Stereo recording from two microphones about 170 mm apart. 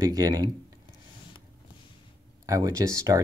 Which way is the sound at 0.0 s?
20° right (ahead or behind).